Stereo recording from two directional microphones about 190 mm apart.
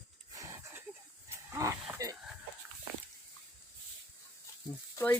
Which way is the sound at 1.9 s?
15° right (ahead or behind).